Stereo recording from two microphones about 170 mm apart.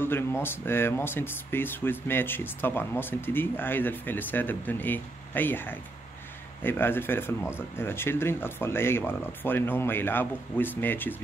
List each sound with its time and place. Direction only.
0.0 s speech: 15° left (ahead or behind)